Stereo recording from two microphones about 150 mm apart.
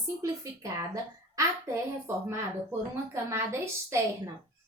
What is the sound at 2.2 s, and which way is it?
A woman's voice, 15° right (ahead or behind).